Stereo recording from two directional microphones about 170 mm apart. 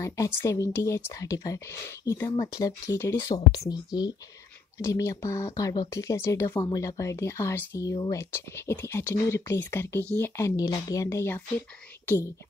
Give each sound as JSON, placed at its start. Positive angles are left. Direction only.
{"t": 0.0, "sound": "speech", "side_deg": 20}